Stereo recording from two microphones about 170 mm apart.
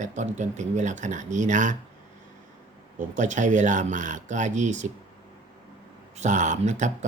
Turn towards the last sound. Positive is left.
turn(degrees=-45)  # may be behind; listen again after turning